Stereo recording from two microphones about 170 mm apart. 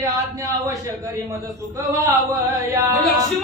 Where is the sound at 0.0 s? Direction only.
20° right (ahead or behind).